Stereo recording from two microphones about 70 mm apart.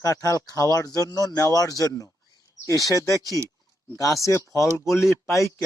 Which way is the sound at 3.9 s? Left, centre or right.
Left.